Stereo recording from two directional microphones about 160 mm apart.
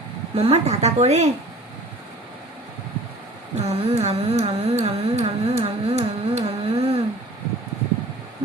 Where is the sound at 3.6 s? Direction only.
40° right (ahead or behind).